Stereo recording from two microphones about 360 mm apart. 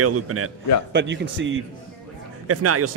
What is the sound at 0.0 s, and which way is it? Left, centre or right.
A man's voice, right.